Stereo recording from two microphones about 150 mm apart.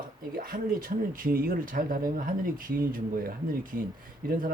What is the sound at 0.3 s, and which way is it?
Speech, 70° right (ahead or behind).